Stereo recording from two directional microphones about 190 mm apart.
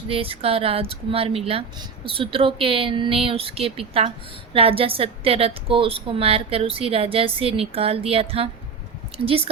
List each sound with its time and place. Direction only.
0.1 s a woman's voice: 30° right (ahead or behind)